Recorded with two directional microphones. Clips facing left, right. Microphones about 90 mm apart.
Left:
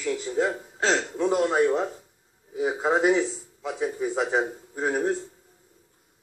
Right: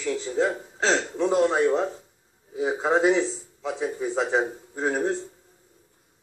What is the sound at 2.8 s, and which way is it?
A man's voice, 10° left (ahead or behind).